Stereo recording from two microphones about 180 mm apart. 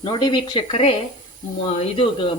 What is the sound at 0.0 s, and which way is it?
Speech, 25° left (ahead or behind).